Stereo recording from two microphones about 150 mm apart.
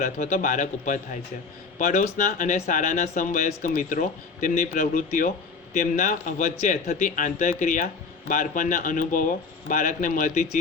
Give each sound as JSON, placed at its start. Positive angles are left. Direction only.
{"t": 0.0, "sound": "speech", "side_deg": 60}